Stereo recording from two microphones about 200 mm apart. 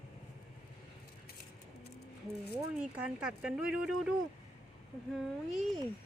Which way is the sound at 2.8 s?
5° right (ahead or behind).